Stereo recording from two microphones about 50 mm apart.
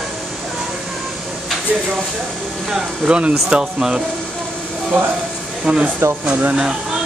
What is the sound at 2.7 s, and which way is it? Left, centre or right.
Speech, right.